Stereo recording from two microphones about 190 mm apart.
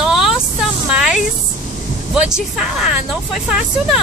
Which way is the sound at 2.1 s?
5° right (ahead or behind).